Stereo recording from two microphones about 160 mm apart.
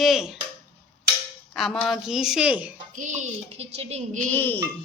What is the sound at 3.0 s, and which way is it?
Speech, 50° right (ahead or behind).